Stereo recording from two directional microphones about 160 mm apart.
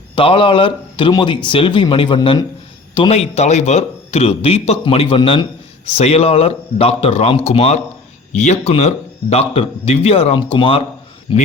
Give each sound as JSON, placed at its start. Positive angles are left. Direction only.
{"t": 0.2, "sound": "a man's voice", "side_deg": 35}